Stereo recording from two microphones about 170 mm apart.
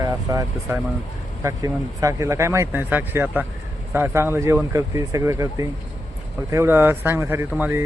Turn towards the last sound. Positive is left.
turn(degrees=-10)  # may be behind; listen again after turning